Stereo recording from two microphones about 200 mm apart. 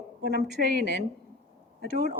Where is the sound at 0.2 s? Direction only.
55° right (ahead or behind).